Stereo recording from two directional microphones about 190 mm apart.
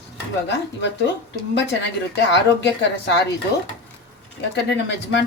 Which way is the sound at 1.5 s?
65° left (ahead or behind).